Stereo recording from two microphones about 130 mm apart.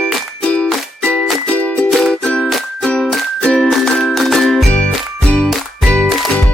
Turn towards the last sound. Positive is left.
turn(degrees=5)  # may be behind; listen again after turning